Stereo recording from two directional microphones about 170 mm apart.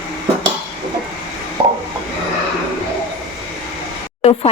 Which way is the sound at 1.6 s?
30° right (ahead or behind).